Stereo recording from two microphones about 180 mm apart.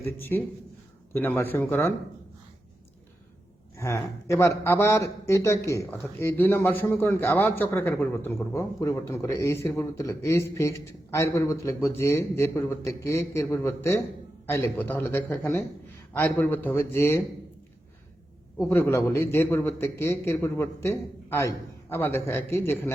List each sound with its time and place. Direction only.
0.0 s a man's voice: 10° left (ahead or behind)
3.8 s a man's voice: 15° left (ahead or behind)
18.5 s a man's voice: 10° left (ahead or behind)